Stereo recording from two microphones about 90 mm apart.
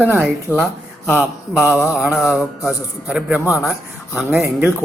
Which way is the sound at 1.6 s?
30° left (ahead or behind).